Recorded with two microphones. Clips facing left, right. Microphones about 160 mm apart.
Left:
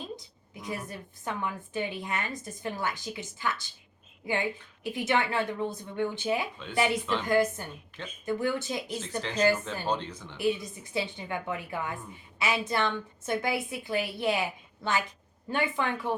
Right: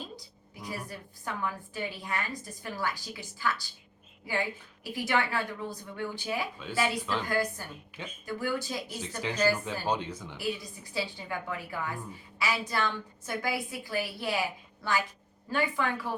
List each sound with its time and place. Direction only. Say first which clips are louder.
0.2 s a woman's voice: even; 20° left (ahead or behind)
7.0 s a woman's voice: left 2 dB; centre (ahead or behind)
7.3 s a woman's voice: left 5 dB; 20° left (ahead or behind)
8.9 s speech: left 2 dB; 10° right (ahead or behind)
10.3 s a woman's voice: left 7 dB; 20° left (ahead or behind)
15.4 s a woman's voice: left 1 dB; 20° left (ahead or behind)